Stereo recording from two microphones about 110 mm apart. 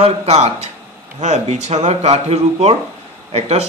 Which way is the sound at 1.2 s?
90° right.